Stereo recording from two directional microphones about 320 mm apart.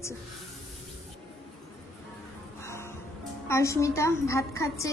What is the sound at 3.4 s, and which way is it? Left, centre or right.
Speech, centre.